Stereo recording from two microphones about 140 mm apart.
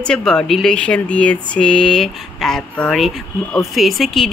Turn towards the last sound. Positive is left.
turn(degrees=0)  # may be behind; listen again after turning